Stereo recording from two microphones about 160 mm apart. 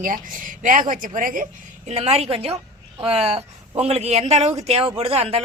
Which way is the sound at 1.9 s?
40° right (ahead or behind).